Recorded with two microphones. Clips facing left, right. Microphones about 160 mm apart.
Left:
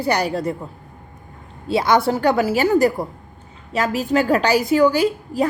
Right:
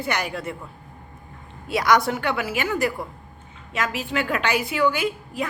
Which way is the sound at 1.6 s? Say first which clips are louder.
Left 3 dB; 30° left (ahead or behind).